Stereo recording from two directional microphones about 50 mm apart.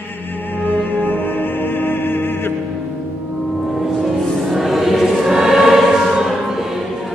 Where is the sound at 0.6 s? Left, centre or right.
Left.